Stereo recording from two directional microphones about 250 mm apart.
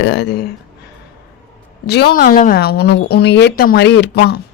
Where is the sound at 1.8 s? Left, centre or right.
Left.